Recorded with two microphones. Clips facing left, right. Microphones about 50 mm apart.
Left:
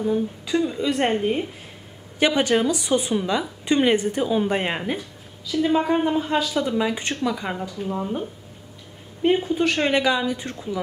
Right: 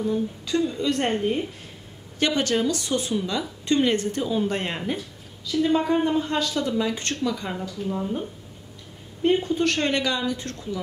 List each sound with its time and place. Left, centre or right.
0.0 s a woman's voice: centre
9.2 s a woman's voice: centre